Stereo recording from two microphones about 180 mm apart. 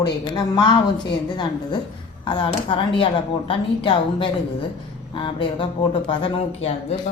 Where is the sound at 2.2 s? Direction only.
25° left (ahead or behind).